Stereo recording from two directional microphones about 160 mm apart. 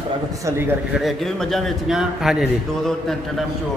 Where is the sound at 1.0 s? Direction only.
Centre (ahead or behind).